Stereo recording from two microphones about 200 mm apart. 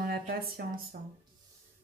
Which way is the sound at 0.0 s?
50° right (ahead or behind).